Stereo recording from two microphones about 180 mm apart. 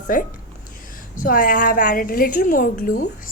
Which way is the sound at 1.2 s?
50° left (ahead or behind).